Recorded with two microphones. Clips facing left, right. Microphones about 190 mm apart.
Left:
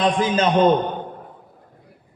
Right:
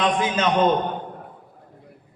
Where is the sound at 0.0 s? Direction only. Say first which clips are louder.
Left 3 dB; 35° left (ahead or behind).